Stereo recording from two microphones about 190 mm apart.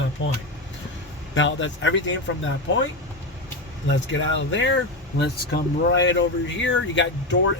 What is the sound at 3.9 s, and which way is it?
Speech, 75° left (ahead or behind).